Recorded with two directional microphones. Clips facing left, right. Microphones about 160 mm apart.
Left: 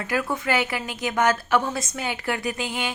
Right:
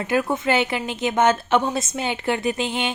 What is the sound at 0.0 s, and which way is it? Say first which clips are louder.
A woman's voice: right 4 dB; 25° right (ahead or behind).